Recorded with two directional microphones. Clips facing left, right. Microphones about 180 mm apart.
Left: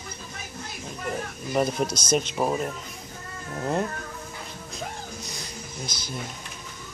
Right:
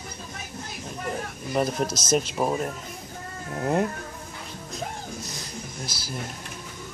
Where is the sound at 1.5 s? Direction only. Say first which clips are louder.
Left 1 dB; centre (ahead or behind).